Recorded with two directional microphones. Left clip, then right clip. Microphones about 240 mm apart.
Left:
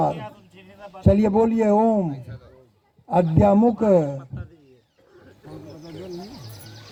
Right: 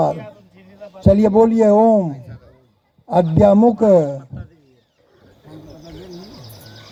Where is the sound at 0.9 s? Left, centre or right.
Right.